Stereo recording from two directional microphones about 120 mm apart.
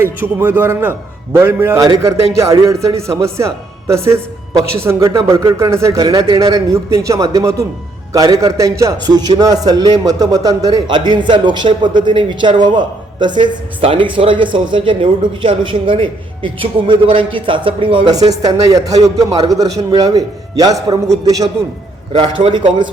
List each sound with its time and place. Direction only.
0.0 s a man's voice: 20° right (ahead or behind); by 18.1 s 45° right (ahead or behind)
18.1 s a man's voice: 30° right (ahead or behind)
22.1 s a man's voice: 45° right (ahead or behind)